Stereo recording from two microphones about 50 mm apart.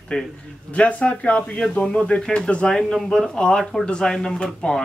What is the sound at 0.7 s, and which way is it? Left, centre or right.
Speech, left.